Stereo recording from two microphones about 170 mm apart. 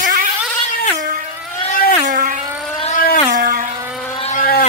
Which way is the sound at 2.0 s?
50° right (ahead or behind).